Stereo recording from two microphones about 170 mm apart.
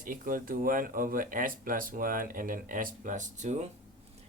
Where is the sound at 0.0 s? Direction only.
55° right (ahead or behind).